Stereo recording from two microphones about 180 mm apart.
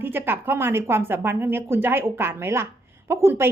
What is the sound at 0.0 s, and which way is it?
A woman's voice, 10° right (ahead or behind).